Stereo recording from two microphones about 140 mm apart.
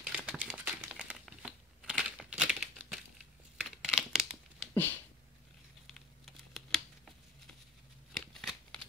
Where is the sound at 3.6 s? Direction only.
5° right (ahead or behind).